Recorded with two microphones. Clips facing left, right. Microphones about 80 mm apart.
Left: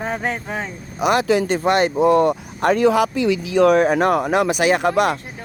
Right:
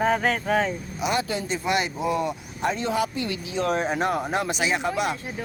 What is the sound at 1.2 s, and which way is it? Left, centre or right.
Speech, left.